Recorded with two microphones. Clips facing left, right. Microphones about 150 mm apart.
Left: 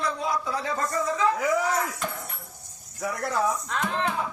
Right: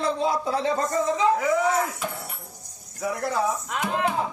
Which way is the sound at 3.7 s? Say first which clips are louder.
Right 2 dB; 15° right (ahead or behind).